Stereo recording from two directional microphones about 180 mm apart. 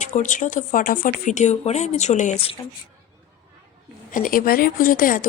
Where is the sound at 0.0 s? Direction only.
45° left (ahead or behind).